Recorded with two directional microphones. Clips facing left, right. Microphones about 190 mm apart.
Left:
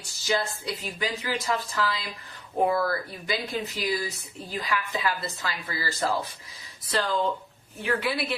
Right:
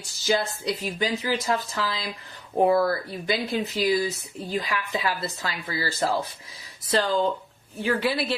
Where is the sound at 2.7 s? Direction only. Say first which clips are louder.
Right 4 dB; 30° right (ahead or behind).